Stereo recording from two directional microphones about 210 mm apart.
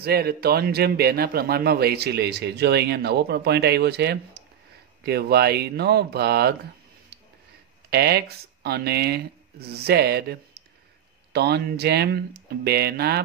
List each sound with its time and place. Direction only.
0.0 s a man's voice: 45° right (ahead or behind)
7.9 s a man's voice: 50° right (ahead or behind)